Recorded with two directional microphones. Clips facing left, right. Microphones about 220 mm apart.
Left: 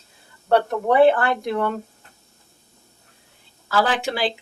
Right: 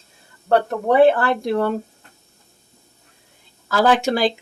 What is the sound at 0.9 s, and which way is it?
Speech, 35° right (ahead or behind).